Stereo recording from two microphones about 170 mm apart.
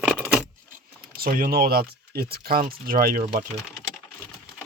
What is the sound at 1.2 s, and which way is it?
Speech, 55° right (ahead or behind).